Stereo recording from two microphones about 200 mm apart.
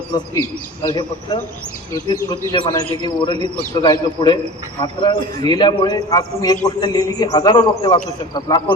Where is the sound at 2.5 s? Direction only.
20° left (ahead or behind).